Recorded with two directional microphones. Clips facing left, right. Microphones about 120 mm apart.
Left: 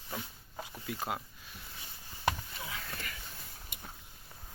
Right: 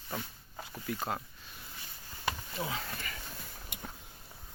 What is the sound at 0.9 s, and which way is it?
Speech, 10° left (ahead or behind).